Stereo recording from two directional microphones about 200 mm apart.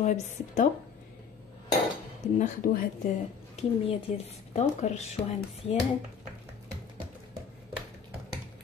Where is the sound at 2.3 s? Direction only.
40° left (ahead or behind).